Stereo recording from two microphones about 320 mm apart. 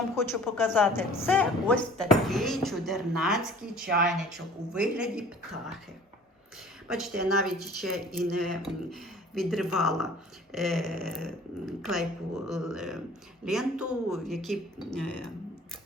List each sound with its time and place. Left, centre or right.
0.2 s speech: centre
3.8 s speech: right
4.1 s speech: centre
6.8 s speech: centre